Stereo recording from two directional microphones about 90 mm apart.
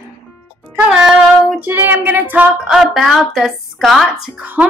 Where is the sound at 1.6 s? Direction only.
25° right (ahead or behind).